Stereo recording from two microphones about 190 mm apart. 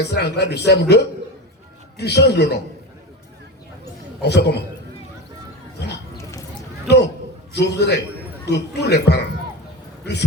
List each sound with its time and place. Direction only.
0.0 s a man's voice: 60° left (ahead or behind)
4.2 s a man's voice: 60° left (ahead or behind)
6.8 s a sound: 60° left (ahead or behind)
7.5 s a man's voice: 60° left (ahead or behind)